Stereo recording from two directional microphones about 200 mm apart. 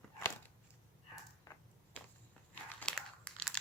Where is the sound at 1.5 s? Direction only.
15° left (ahead or behind).